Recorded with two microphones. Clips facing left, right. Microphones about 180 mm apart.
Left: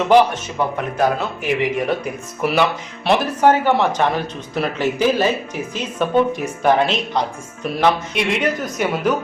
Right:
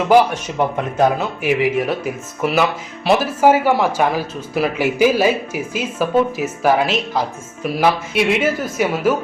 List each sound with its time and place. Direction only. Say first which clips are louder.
0.8 s speech: right 2 dB; 20° right (ahead or behind)
1.4 s speech: right 3 dB; 5° right (ahead or behind)